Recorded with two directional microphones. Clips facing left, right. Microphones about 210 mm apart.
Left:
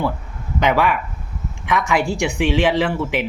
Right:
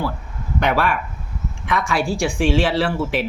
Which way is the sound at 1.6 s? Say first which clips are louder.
Left 2 dB; 15° left (ahead or behind).